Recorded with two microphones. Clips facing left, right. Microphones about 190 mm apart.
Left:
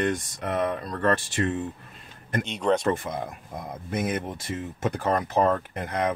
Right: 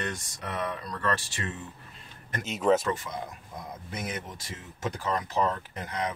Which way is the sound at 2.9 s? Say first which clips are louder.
Left 5 dB; 55° left (ahead or behind).